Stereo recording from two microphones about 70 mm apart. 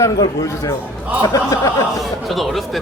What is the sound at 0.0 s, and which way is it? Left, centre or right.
A man's voice, left.